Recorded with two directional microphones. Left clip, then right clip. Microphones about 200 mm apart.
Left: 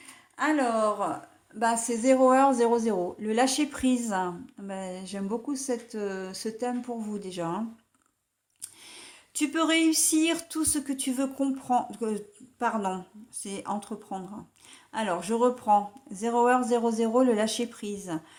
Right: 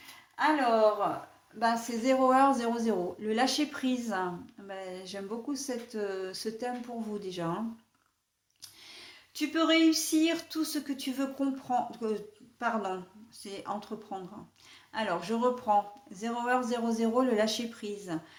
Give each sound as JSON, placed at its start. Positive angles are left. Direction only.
{"t": 0.3, "sound": "a woman's voice", "side_deg": 50}
{"t": 8.6, "sound": "speech", "side_deg": 40}